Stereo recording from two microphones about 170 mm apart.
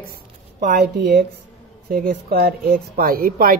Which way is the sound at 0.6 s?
70° right (ahead or behind).